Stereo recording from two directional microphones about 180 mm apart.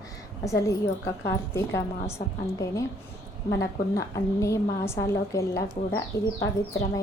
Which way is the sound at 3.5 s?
15° left (ahead or behind).